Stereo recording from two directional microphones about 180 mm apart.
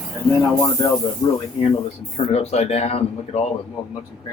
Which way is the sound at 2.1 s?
35° left (ahead or behind).